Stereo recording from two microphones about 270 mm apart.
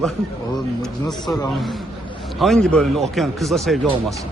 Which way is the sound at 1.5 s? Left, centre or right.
Centre.